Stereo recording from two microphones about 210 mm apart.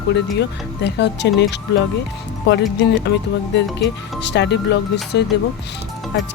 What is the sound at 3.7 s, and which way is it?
Speech, 55° left (ahead or behind).